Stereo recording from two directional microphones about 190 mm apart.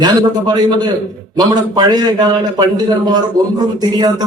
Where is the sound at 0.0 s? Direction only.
20° right (ahead or behind).